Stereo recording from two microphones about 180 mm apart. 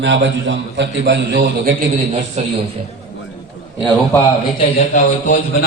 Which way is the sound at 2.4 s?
40° right (ahead or behind).